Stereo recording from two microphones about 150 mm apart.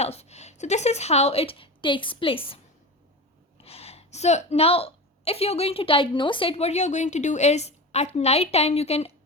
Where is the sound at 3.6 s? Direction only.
40° left (ahead or behind).